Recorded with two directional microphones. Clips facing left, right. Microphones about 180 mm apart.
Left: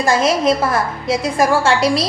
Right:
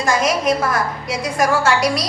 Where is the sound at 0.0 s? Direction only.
25° left (ahead or behind).